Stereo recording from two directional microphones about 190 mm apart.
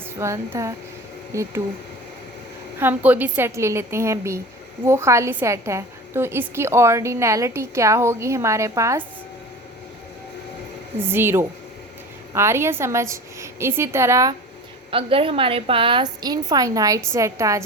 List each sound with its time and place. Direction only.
0.2 s a woman's voice: 15° right (ahead or behind)
2.7 s a woman's voice: 10° right (ahead or behind)
11.0 s a woman's voice: 10° right (ahead or behind)
14.8 s a woman's voice: 30° right (ahead or behind)